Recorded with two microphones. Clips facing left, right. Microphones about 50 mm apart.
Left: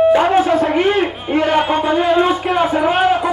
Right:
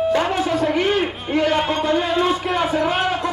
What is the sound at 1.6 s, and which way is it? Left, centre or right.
Music, centre.